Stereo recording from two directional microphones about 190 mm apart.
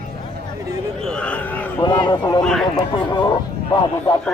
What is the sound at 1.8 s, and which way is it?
Speech, 20° left (ahead or behind).